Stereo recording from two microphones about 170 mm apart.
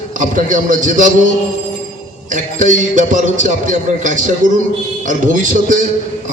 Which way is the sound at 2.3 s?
50° right (ahead or behind).